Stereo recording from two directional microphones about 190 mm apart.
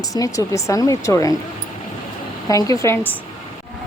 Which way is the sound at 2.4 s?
20° left (ahead or behind).